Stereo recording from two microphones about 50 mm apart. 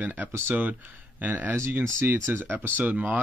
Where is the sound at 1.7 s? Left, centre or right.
Right.